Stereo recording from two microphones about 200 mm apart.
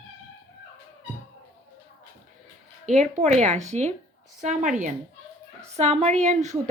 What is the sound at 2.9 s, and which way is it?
A woman's voice, 35° right (ahead or behind).